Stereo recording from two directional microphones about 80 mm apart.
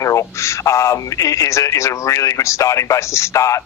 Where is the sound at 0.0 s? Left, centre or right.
Left.